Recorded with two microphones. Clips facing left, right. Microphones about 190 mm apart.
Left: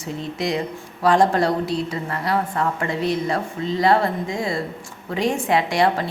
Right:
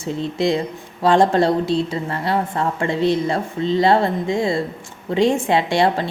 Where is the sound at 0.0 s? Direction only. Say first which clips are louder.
Right 5 dB; 30° right (ahead or behind).